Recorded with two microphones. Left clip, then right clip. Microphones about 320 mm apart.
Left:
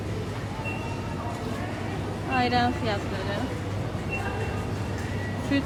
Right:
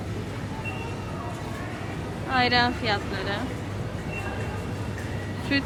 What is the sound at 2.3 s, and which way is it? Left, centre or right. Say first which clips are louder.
Speech: right 2 dB; centre.